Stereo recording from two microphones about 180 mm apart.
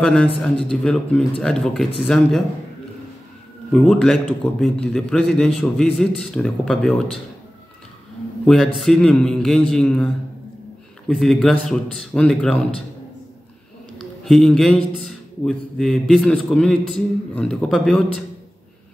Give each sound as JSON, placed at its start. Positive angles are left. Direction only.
{"t": 0.0, "sound": "a man's voice", "side_deg": 5}
{"t": 3.7, "sound": "a man's voice", "side_deg": 5}
{"t": 8.7, "sound": "a man's voice", "side_deg": 0}
{"t": 14.2, "sound": "a man's voice", "side_deg": 0}